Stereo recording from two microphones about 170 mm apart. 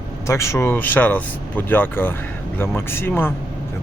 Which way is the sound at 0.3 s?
15° left (ahead or behind).